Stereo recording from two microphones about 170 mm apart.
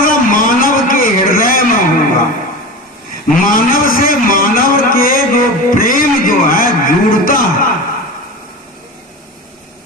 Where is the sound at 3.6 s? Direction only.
55° left (ahead or behind).